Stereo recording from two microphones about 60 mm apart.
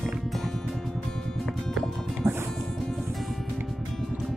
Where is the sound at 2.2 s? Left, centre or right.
Right.